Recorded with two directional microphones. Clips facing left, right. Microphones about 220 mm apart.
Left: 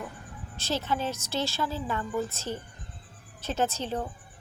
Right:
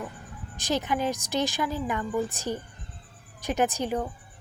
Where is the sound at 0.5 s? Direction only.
15° right (ahead or behind).